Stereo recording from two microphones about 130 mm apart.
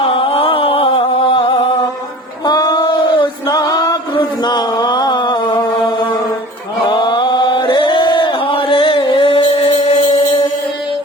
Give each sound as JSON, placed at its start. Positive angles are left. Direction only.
{"t": 0.0, "sound": "music", "side_deg": 45}
{"t": 2.5, "sound": "a sound", "side_deg": 30}
{"t": 6.9, "sound": "chant", "side_deg": 35}